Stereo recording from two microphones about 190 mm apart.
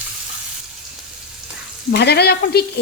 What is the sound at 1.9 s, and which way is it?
Sizzle, 60° left (ahead or behind).